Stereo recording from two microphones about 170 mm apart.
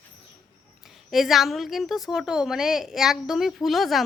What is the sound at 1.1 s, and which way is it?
A woman's voice, centre (ahead or behind).